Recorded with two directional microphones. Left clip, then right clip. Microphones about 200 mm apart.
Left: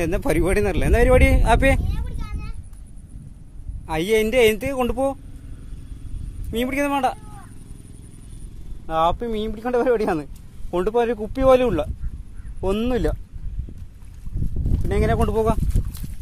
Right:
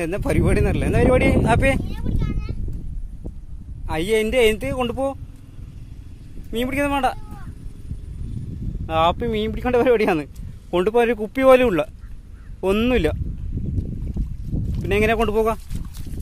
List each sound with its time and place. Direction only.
0.0 s speech: 10° left (ahead or behind)
3.8 s a man's voice: centre (ahead or behind)
6.5 s a man's voice: centre (ahead or behind)
8.8 s speech: 20° right (ahead or behind)
15.0 s speech: 20° right (ahead or behind)